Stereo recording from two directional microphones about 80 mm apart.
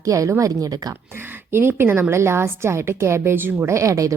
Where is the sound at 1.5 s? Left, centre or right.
Right.